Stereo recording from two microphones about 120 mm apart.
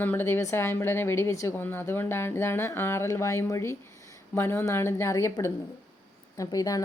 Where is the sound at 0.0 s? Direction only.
15° left (ahead or behind).